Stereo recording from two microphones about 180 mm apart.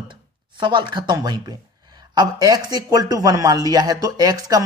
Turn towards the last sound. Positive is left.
turn(degrees=-20)  # may be behind; listen again after turning